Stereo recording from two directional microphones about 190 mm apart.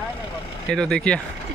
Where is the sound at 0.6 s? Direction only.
5° left (ahead or behind).